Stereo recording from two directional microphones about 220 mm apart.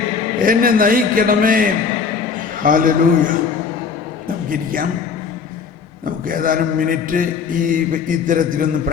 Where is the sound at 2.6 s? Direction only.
40° right (ahead or behind).